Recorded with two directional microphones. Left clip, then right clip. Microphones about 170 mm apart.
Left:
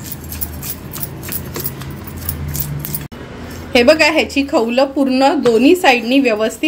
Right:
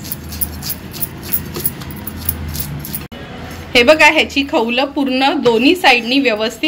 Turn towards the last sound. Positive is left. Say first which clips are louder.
# even
turn(degrees=45)  # may be behind; listen again after turning